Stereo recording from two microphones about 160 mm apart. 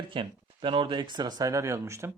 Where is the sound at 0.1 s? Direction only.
30° right (ahead or behind).